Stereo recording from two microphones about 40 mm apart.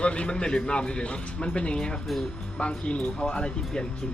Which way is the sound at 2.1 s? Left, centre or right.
Centre.